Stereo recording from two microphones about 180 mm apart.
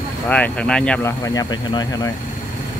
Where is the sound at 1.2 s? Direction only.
20° left (ahead or behind).